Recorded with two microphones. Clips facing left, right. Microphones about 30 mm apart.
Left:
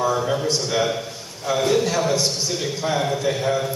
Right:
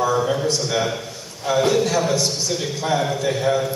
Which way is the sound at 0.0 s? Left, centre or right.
Centre.